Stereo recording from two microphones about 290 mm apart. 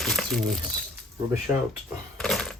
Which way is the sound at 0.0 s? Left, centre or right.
Centre.